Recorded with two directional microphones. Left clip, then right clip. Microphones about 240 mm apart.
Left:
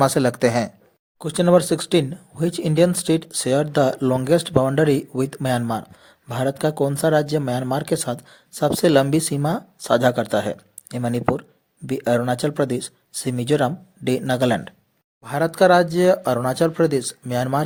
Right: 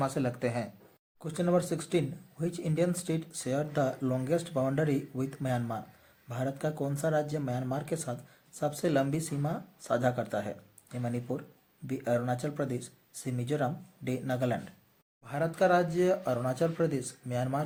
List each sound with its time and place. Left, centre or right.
0.0 s speech: left